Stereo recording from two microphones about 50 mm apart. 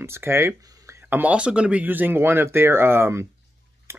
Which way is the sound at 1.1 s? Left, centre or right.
Right.